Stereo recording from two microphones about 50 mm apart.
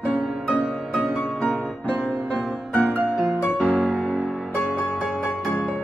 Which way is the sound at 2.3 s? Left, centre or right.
Left.